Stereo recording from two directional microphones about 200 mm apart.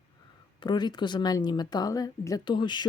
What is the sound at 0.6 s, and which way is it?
Speech, 20° left (ahead or behind).